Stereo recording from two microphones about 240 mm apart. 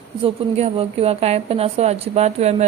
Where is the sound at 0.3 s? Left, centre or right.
Right.